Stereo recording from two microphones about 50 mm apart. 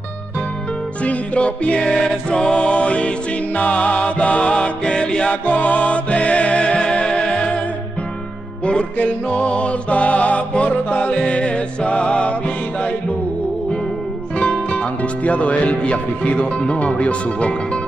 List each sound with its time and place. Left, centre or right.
1.0 s music: left
8.6 s music: left
14.4 s music: left